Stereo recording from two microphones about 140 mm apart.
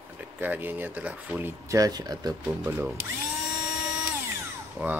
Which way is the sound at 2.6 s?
15° right (ahead or behind).